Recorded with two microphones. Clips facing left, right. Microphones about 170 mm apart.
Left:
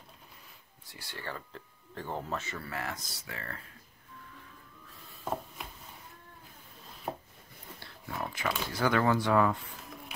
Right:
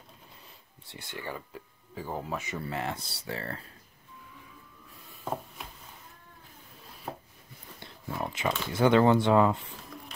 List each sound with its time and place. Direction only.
0.8 s speech: 20° right (ahead or behind)
5.6 s a sound: centre (ahead or behind)
7.1 s chopping: 15° left (ahead or behind)
7.8 s speech: 20° right (ahead or behind)